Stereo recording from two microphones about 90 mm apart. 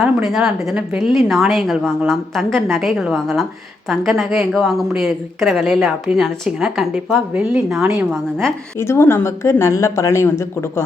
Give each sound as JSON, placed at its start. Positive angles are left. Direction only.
{"t": 0.0, "sound": "speech", "side_deg": -5}
{"t": 8.1, "sound": "speech", "side_deg": 5}
{"t": 8.8, "sound": "speech", "side_deg": 30}